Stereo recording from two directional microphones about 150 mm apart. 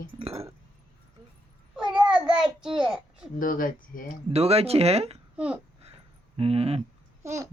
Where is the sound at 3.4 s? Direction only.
65° left (ahead or behind).